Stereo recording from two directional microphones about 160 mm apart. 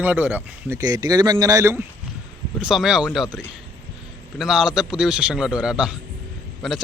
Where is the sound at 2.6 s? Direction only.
5° right (ahead or behind).